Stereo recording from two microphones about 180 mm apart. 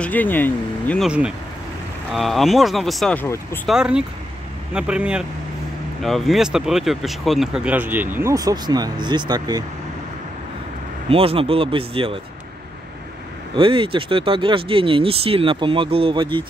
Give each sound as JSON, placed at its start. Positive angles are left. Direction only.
{"t": 0.0, "sound": "speech", "side_deg": 10}
{"t": 1.0, "sound": "speech", "side_deg": -5}
{"t": 3.6, "sound": "speech", "side_deg": -5}
{"t": 11.1, "sound": "speech", "side_deg": -30}
{"t": 13.6, "sound": "speech", "side_deg": -30}